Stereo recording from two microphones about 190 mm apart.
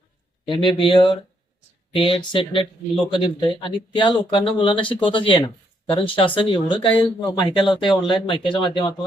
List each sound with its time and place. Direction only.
0.5 s speech: 25° left (ahead or behind)